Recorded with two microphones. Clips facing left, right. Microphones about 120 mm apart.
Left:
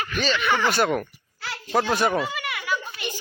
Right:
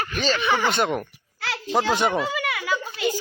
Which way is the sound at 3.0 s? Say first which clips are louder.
Right 8 dB; 90° right.